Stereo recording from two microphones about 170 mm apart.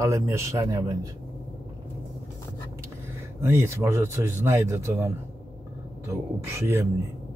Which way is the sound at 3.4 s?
15° right (ahead or behind).